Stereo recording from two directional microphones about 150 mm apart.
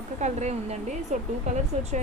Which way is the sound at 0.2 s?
50° right (ahead or behind).